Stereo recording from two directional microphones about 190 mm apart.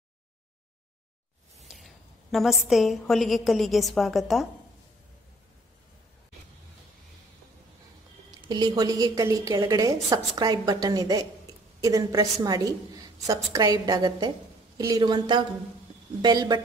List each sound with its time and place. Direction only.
1.6 s a sound: centre (ahead or behind)
2.3 s a woman's voice: centre (ahead or behind)
8.4 s a woman's voice: 20° right (ahead or behind)